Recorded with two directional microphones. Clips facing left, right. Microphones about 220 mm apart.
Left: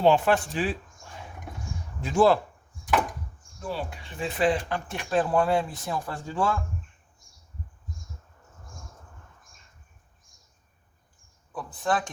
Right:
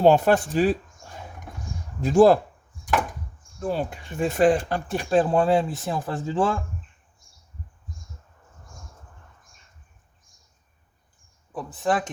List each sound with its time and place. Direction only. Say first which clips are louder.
0.0 s speech: right 4 dB; 40° right (ahead or behind)
3.6 s speech: right 6 dB; 45° right (ahead or behind); by 6.6 s 25° right (ahead or behind)
11.5 s speech: right 3 dB; 25° right (ahead or behind)